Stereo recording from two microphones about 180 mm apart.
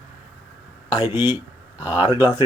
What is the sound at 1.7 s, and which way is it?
Speech, 10° right (ahead or behind).